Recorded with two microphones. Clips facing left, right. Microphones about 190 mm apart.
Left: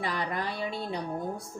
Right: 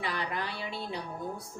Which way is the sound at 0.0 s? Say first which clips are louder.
Left 3 dB; 40° left (ahead or behind).